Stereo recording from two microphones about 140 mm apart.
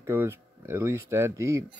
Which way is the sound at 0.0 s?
15° right (ahead or behind).